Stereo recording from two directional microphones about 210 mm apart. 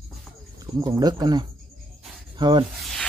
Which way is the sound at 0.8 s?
15° right (ahead or behind).